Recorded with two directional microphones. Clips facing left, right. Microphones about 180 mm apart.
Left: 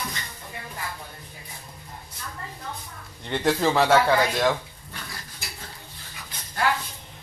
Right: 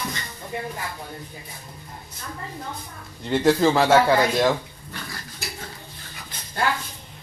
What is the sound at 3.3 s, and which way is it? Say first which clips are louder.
Speech: right 5 dB; centre (ahead or behind).